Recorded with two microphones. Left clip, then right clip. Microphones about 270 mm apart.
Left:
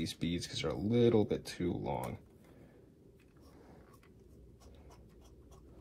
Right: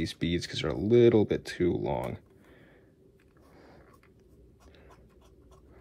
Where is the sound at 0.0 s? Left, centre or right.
Right.